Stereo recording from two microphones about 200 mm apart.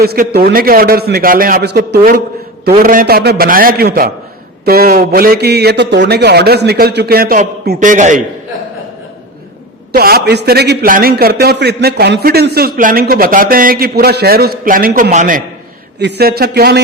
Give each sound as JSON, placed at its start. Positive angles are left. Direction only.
{"t": 0.0, "sound": "a man's voice", "side_deg": -50}
{"t": 9.9, "sound": "a man's voice", "side_deg": -50}
{"t": 16.0, "sound": "a man's voice", "side_deg": -55}